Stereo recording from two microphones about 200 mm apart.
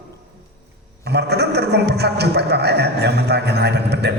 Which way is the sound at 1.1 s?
55° right (ahead or behind).